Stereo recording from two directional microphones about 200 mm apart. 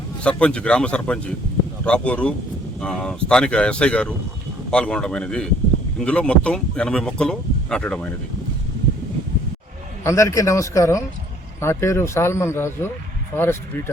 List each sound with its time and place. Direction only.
0.2 s speech: 5° left (ahead or behind)
10.0 s speech: 15° left (ahead or behind)